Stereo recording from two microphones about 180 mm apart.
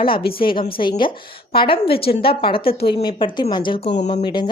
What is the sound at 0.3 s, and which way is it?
A woman's voice, 30° left (ahead or behind).